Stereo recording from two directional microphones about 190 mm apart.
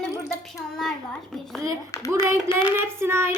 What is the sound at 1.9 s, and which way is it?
Speech, 15° left (ahead or behind).